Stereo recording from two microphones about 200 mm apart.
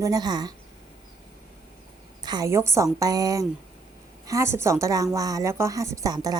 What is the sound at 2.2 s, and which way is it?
A woman's voice, 20° right (ahead or behind).